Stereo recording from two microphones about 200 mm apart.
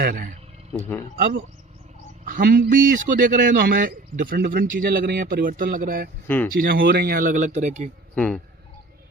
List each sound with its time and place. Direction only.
0.0 s speech: 45° right (ahead or behind)
0.7 s speech: 10° left (ahead or behind)
1.1 s a man's voice: 45° right (ahead or behind)
6.2 s speech: 10° left (ahead or behind)
6.5 s a man's voice: 45° right (ahead or behind)
8.1 s speech: 5° left (ahead or behind)